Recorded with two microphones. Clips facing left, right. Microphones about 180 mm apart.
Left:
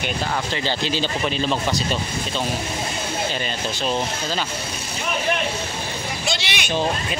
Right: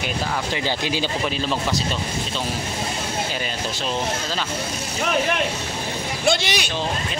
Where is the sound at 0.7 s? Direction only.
10° right (ahead or behind).